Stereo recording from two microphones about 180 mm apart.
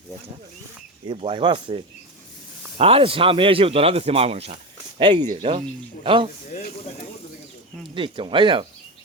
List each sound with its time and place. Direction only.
1.0 s speech: 30° right (ahead or behind)
5.2 s speech: 40° right (ahead or behind)
7.9 s speech: 30° right (ahead or behind)